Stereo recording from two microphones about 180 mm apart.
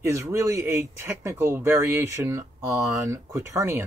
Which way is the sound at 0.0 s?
15° right (ahead or behind).